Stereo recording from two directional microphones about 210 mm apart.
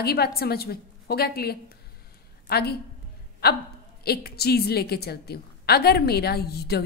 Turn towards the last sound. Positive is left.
turn(degrees=50)  # may be behind; listen again after turning